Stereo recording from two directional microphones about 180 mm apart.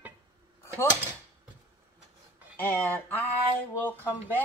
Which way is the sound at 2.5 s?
10° left (ahead or behind).